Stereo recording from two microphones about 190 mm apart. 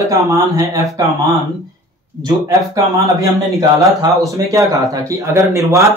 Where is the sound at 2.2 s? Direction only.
15° right (ahead or behind).